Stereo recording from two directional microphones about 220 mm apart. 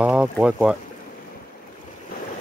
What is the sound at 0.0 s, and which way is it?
Speech, 5° right (ahead or behind).